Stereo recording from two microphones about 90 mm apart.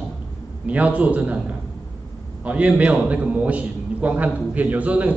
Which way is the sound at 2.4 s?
15° right (ahead or behind).